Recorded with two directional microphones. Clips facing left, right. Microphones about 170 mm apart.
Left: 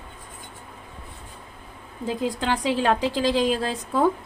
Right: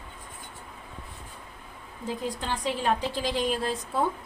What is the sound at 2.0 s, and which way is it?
A woman's voice, 90° left.